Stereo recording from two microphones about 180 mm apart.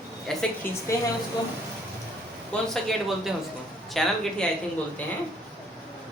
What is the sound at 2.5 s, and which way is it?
A woman's voice, centre (ahead or behind).